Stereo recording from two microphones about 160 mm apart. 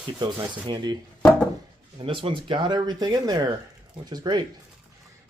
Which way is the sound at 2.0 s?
35° right (ahead or behind).